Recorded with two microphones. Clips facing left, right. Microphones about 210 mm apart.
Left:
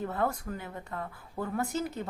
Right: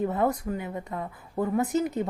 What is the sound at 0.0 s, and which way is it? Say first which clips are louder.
Speech: right 6 dB; 20° right (ahead or behind).